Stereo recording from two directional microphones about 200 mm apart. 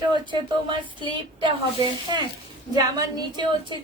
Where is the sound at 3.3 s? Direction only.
20° right (ahead or behind).